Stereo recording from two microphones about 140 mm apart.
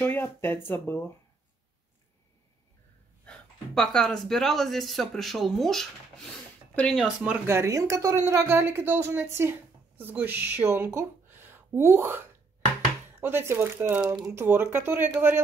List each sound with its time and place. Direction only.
0.0 s speech: 15° left (ahead or behind)
3.3 s speech: 5° left (ahead or behind)
7.0 s speech: 10° right (ahead or behind)
7.4 s speech: 20° right (ahead or behind)
13.2 s speech: 15° right (ahead or behind)